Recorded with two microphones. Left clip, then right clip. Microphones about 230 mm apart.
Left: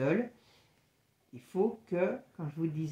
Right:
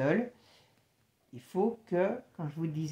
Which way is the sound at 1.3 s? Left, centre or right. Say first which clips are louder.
Even; right.